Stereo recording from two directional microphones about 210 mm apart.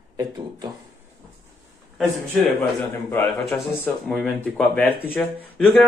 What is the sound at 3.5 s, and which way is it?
Speech, centre (ahead or behind).